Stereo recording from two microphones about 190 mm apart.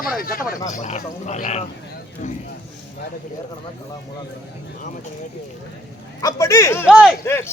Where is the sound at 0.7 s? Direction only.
40° left (ahead or behind).